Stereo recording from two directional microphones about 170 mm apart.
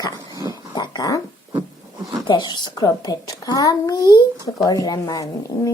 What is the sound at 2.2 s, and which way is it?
Speech, 25° left (ahead or behind).